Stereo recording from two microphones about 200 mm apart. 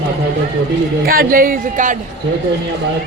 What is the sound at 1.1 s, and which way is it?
Speech, 45° right (ahead or behind).